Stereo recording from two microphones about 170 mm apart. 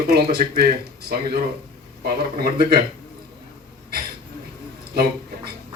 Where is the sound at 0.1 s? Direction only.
70° right (ahead or behind).